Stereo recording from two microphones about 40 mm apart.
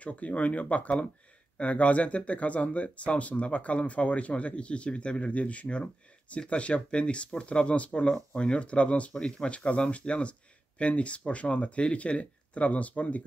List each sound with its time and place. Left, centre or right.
0.0 s speech: left